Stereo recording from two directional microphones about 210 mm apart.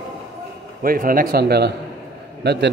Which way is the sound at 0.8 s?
40° right (ahead or behind).